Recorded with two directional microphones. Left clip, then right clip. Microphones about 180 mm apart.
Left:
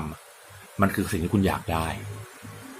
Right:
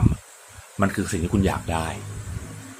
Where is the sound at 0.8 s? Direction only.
5° right (ahead or behind).